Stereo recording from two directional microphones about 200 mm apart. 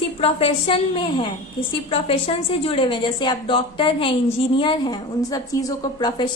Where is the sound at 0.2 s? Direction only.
30° left (ahead or behind).